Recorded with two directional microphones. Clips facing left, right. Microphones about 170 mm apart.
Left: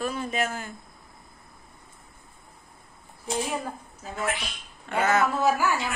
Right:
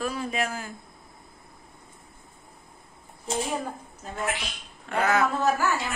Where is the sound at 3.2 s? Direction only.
Centre (ahead or behind).